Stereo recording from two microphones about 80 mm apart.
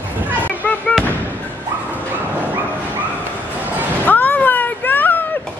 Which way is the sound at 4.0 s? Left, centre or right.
Left.